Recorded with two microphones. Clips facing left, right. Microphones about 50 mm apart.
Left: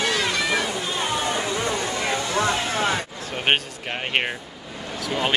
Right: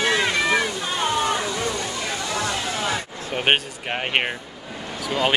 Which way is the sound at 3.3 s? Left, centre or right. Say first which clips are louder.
Right 2 dB; centre.